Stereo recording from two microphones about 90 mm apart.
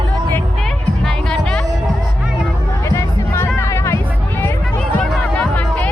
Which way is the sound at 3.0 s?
30° left (ahead or behind).